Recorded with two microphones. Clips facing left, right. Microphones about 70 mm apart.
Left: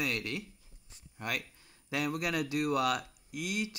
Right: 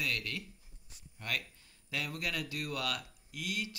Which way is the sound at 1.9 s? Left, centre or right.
Centre.